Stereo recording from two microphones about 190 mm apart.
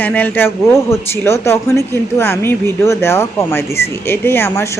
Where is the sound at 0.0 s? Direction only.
10° left (ahead or behind).